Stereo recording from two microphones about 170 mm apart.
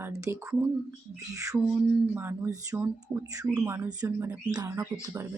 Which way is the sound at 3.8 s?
20° right (ahead or behind).